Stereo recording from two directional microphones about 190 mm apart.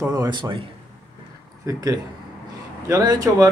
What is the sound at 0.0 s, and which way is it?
Speech, 20° right (ahead or behind).